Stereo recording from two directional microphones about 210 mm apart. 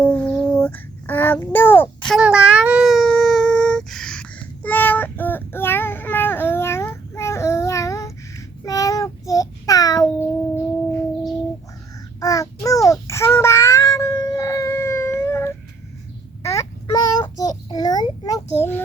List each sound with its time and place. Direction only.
0.1 s child singing: 10° left (ahead or behind)
2.1 s child singing: 5° right (ahead or behind); by 10.6 s 15° left (ahead or behind)
12.2 s child singing: 15° left (ahead or behind)